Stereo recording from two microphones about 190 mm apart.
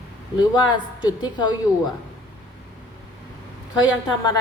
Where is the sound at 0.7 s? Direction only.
20° left (ahead or behind).